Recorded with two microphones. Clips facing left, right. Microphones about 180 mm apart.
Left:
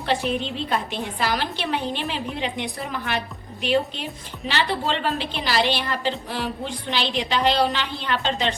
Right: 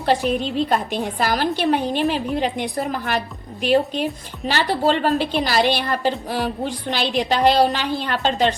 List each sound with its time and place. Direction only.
0.0 s a woman's voice: 40° right (ahead or behind)